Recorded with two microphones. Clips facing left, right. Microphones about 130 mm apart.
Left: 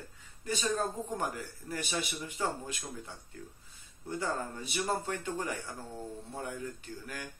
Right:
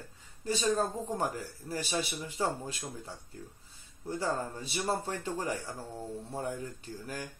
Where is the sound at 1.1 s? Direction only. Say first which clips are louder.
Right 2 dB; 35° right (ahead or behind).